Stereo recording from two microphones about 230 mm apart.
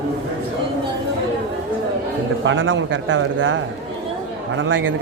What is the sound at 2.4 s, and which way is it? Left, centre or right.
A man's voice, right.